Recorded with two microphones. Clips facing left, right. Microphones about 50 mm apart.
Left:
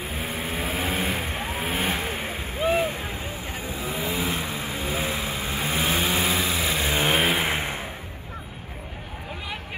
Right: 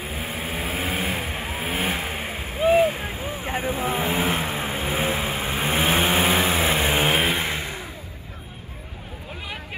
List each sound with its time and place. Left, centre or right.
0.0 s vehicle: centre
3.4 s vehicle: right
7.0 s vehicle: centre
7.5 s a sound: left